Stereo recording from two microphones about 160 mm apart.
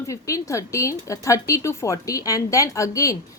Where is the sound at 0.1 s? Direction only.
20° left (ahead or behind).